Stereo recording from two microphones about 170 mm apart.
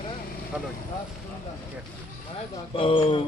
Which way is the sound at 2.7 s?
30° left (ahead or behind).